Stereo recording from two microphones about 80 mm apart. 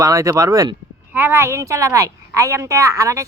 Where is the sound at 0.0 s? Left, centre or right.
Right.